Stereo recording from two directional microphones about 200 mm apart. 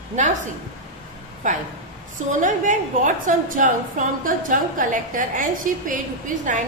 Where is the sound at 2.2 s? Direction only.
40° right (ahead or behind).